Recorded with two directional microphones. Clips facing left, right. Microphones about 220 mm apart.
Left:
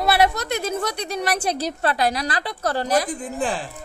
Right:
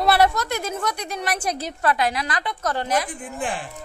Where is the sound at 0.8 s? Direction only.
35° left (ahead or behind).